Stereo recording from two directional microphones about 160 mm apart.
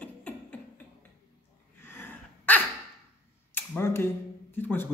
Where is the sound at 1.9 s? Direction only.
10° left (ahead or behind).